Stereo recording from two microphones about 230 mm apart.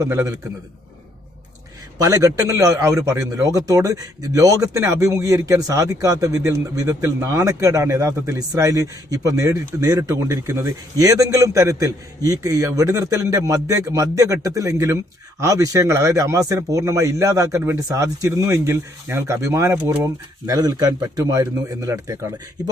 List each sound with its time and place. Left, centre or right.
0.0 s a man's voice: centre
2.0 s a man's voice: centre